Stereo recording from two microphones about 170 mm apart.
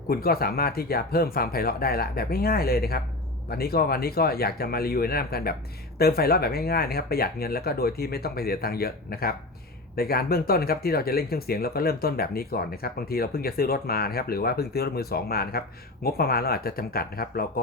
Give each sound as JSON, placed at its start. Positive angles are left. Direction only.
{"t": 0.1, "sound": "speech", "side_deg": 60}